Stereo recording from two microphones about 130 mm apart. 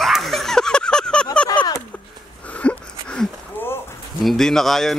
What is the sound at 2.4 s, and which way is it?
Wheeze, 10° left (ahead or behind).